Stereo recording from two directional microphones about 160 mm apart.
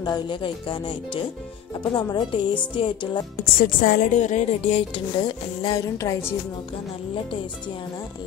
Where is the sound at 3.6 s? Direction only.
60° left (ahead or behind).